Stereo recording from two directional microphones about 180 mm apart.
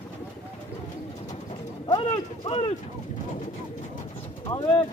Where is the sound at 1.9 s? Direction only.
30° left (ahead or behind).